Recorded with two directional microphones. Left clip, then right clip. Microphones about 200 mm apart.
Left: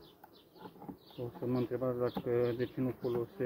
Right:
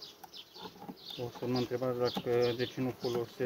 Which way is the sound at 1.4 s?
10° right (ahead or behind).